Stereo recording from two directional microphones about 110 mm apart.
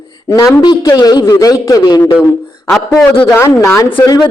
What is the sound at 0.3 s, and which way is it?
A woman's voice, 35° left (ahead or behind).